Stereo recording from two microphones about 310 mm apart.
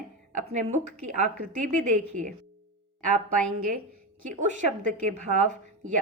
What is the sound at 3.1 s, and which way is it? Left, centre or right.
Speech, right.